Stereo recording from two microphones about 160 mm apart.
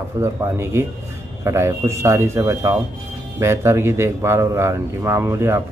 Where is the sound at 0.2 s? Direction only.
15° right (ahead or behind).